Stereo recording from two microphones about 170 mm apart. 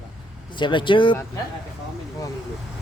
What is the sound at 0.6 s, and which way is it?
Speech, 30° left (ahead or behind).